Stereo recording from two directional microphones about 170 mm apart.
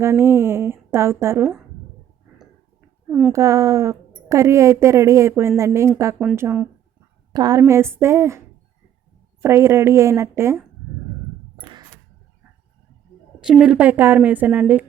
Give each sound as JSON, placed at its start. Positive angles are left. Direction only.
{"t": 0.0, "sound": "a woman's voice", "side_deg": -15}
{"t": 3.1, "sound": "a child's voice", "side_deg": -5}
{"t": 3.3, "sound": "a woman's voice", "side_deg": -20}
{"t": 7.3, "sound": "a woman's voice", "side_deg": -20}
{"t": 9.4, "sound": "a woman's voice", "side_deg": -15}
{"t": 13.4, "sound": "a woman's voice", "side_deg": -5}